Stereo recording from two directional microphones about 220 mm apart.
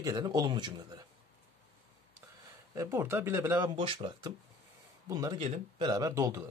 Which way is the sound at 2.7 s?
10° right (ahead or behind).